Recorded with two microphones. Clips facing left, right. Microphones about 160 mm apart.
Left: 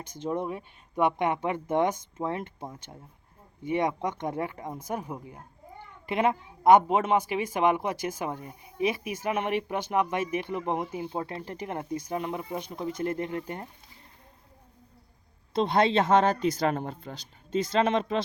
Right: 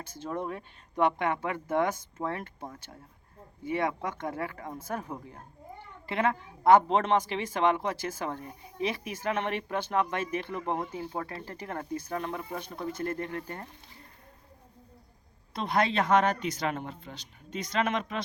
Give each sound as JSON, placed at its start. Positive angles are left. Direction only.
{"t": 0.0, "sound": "speech", "side_deg": 15}
{"t": 15.5, "sound": "speech", "side_deg": 25}